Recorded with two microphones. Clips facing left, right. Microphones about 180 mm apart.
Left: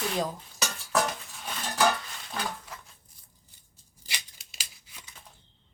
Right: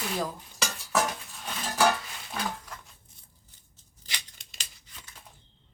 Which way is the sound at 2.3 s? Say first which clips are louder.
Right 1 dB; 5° left (ahead or behind).